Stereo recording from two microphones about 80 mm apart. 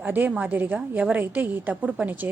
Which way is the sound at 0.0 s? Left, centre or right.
Centre.